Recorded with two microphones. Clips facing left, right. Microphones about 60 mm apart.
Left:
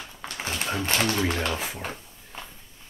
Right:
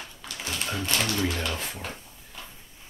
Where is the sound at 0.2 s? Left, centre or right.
Left.